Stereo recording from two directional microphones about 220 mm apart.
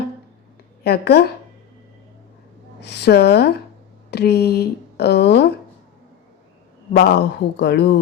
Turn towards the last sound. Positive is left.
turn(degrees=50)  # may be behind; listen again after turning